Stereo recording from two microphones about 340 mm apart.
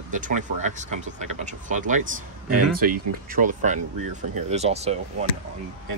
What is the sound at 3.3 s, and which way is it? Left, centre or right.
Speech, right.